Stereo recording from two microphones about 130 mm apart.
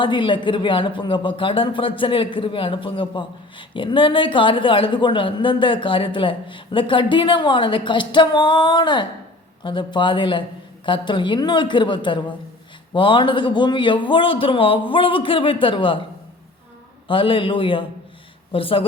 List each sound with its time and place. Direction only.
0.0 s a woman's voice: 40° left (ahead or behind)
17.1 s a woman's voice: 40° left (ahead or behind)